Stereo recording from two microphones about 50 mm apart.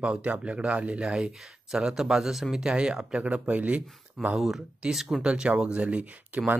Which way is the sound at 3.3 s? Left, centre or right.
Right.